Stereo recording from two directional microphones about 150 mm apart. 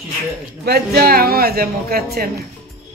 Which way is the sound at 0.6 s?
90° right.